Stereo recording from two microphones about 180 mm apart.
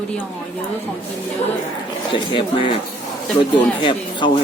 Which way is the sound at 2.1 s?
30° left (ahead or behind).